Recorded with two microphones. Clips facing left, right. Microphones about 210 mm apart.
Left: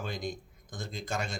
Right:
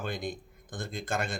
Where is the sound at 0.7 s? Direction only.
55° right (ahead or behind).